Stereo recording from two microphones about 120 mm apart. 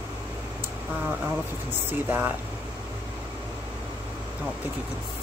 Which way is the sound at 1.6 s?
15° right (ahead or behind).